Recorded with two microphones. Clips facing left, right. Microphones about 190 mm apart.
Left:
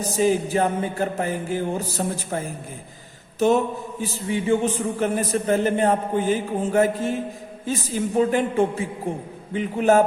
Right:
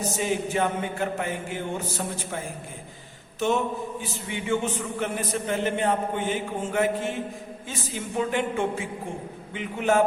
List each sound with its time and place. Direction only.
0.2 s speech: 35° left (ahead or behind)
4.3 s speech: 35° left (ahead or behind)